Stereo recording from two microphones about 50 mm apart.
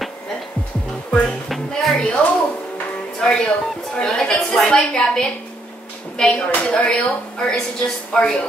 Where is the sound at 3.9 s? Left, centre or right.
Centre.